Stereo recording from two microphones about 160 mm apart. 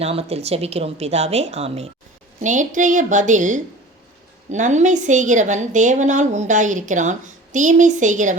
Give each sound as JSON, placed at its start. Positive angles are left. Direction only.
{"t": 0.0, "sound": "a woman's voice", "side_deg": -40}
{"t": 2.4, "sound": "a woman's voice", "side_deg": -50}